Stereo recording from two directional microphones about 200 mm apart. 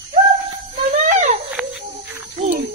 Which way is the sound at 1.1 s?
35° right (ahead or behind).